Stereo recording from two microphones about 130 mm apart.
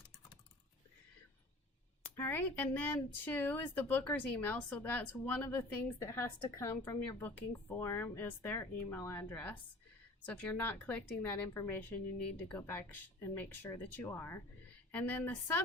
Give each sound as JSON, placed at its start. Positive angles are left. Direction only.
{"t": 2.1, "sound": "speech", "side_deg": 15}